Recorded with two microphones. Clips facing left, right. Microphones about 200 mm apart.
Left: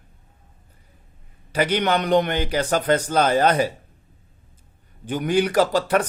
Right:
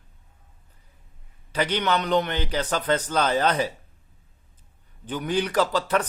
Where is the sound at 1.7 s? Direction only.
55° left (ahead or behind).